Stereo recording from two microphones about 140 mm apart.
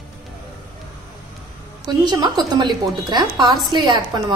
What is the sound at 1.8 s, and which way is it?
Speech, 30° right (ahead or behind).